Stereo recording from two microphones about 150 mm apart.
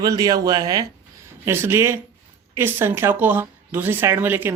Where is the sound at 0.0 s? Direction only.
25° right (ahead or behind).